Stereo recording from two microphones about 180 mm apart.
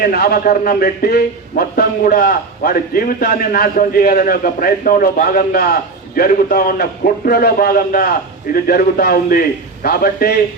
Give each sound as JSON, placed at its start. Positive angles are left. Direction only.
{"t": 0.0, "sound": "a man's voice", "side_deg": 60}